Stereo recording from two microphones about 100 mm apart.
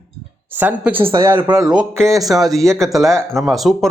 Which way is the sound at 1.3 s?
50° right (ahead or behind).